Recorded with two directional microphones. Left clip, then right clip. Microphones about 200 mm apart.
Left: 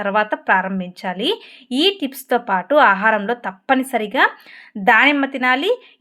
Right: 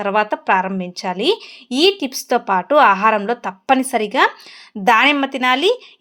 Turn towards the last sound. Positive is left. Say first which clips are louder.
# right 2 dB
turn(degrees=-35)  # may be behind; listen again after turning